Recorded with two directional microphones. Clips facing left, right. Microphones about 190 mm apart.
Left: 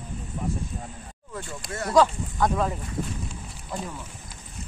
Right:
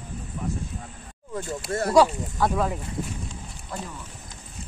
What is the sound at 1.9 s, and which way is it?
Speech, 10° right (ahead or behind).